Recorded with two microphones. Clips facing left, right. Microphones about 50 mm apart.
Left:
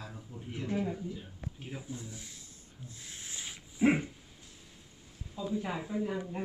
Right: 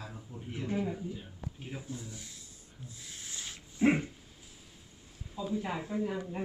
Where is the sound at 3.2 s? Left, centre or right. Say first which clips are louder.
Even; centre.